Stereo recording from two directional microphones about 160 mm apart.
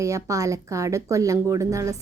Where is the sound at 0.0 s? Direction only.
20° right (ahead or behind).